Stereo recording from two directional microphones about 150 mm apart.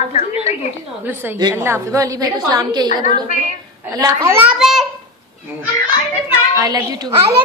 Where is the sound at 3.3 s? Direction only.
60° left (ahead or behind).